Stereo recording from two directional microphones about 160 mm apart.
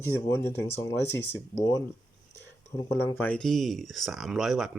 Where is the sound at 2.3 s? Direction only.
20° left (ahead or behind).